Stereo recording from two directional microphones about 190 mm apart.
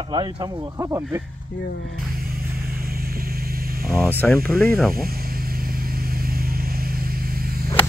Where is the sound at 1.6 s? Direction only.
65° left (ahead or behind).